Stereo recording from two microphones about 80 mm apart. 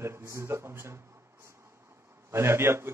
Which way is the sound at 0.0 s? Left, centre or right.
Right.